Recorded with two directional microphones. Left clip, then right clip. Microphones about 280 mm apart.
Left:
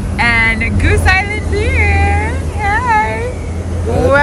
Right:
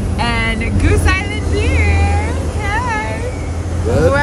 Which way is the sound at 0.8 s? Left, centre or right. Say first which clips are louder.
Left 5 dB; centre.